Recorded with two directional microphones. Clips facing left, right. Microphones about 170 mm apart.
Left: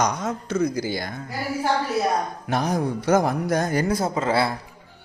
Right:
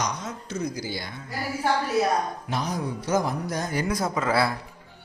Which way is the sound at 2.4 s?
55° left (ahead or behind).